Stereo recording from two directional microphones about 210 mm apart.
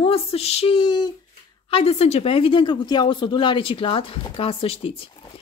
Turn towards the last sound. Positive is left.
turn(degrees=25)  # may be behind; listen again after turning